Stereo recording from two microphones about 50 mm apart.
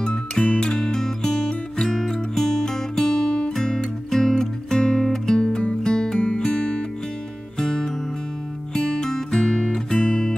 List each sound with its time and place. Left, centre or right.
0.0 s music: centre